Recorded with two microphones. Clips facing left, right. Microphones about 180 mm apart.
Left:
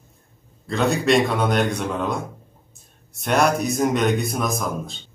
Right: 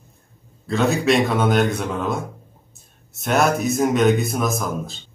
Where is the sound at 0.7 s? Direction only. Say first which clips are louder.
Right 1 dB; centre (ahead or behind).